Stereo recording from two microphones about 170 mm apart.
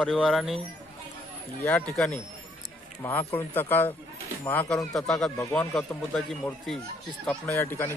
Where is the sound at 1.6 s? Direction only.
10° left (ahead or behind).